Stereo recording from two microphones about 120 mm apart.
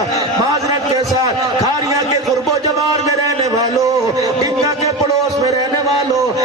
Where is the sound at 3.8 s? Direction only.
25° right (ahead or behind).